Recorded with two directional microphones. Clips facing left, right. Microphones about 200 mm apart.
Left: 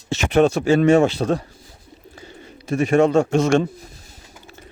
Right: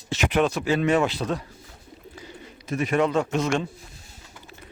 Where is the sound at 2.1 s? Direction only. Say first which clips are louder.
Left 2 dB; 30° left (ahead or behind).